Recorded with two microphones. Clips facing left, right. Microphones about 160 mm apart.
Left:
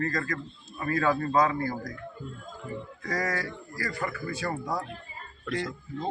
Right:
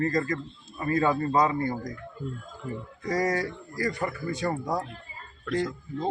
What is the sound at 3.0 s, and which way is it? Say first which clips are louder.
A man's voice: right 5 dB; 20° right (ahead or behind).